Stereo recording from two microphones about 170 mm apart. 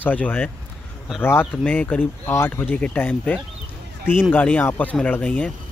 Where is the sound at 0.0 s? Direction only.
10° left (ahead or behind).